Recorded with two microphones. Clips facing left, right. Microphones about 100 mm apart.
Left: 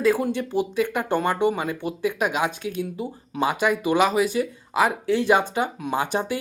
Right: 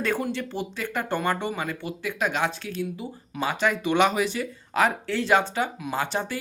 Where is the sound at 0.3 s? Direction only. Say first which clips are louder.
Left 8 dB; 15° left (ahead or behind).